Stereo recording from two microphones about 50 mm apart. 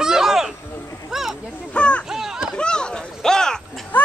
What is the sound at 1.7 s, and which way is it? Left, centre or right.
Speech, left.